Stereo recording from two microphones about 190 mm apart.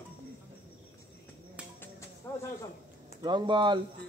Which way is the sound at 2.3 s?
15° left (ahead or behind).